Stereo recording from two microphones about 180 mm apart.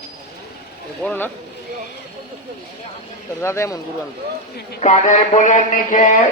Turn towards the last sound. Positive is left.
turn(degrees=45)  # may be behind; listen again after turning